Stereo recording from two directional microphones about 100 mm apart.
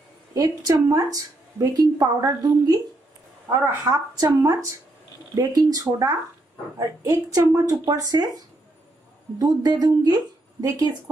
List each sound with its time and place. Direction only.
0.3 s a woman's voice: 40° right (ahead or behind)
9.4 s a woman's voice: 40° right (ahead or behind)